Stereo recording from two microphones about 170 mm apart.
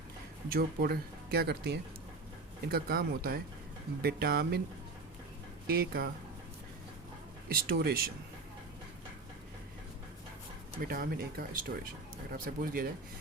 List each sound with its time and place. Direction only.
0.5 s speech: 65° right (ahead or behind)
5.6 s speech: 65° right (ahead or behind)
7.4 s speech: 65° right (ahead or behind)
10.8 s speech: 60° right (ahead or behind)